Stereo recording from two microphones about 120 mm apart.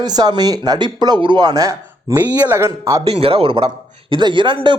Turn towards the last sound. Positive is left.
turn(degrees=-40)  # may be behind; listen again after turning